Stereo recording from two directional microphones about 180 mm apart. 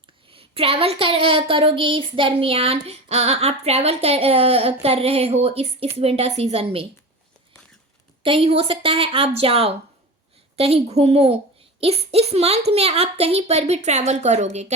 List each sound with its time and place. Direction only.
0.3 s child singing: 30° right (ahead or behind)
8.2 s child singing: 30° right (ahead or behind)